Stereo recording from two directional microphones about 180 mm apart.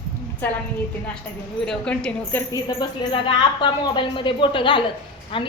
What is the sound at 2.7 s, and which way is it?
A woman's voice, 30° left (ahead or behind).